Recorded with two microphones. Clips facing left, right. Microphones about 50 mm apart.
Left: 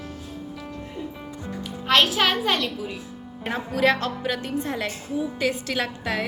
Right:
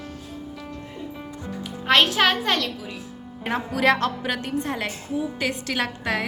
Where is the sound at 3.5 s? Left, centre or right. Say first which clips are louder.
Right 1 dB; right.